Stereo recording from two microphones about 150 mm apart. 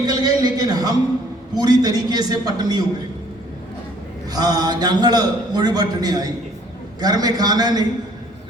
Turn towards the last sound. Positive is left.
turn(degrees=-25)  # may be behind; listen again after turning